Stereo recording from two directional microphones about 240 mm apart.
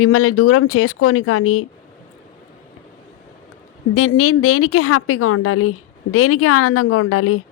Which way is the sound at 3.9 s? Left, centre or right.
Left.